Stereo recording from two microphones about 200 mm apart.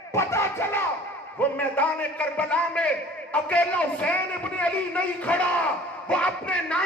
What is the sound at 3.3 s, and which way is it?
A man's voice, 10° left (ahead or behind).